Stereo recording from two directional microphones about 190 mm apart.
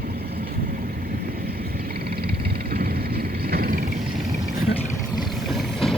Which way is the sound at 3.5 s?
50° right (ahead or behind).